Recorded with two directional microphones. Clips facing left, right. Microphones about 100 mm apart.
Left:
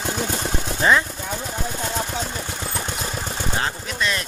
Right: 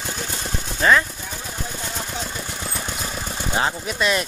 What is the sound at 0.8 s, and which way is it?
Speech, 25° left (ahead or behind).